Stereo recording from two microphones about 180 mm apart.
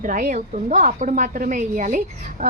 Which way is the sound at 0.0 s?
50° right (ahead or behind).